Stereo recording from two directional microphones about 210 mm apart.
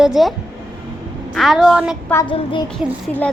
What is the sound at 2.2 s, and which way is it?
Speech, 25° left (ahead or behind).